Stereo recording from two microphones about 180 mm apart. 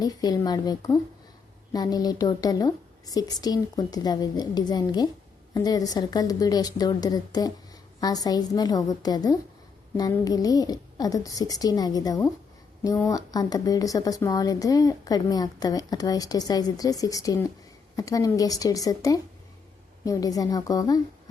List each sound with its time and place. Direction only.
0.0 s speech: 20° left (ahead or behind)